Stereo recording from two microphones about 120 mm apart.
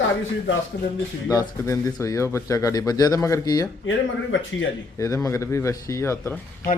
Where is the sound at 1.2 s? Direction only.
25° left (ahead or behind).